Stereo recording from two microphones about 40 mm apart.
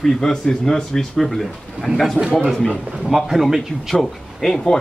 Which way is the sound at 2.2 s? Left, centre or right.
Right.